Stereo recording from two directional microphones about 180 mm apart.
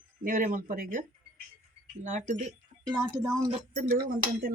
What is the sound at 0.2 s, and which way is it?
Speech, 50° right (ahead or behind).